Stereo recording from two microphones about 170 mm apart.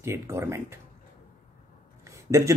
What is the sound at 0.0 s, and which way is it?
Speech, 15° right (ahead or behind).